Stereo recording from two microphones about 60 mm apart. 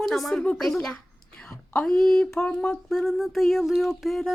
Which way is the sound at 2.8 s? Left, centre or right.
Centre.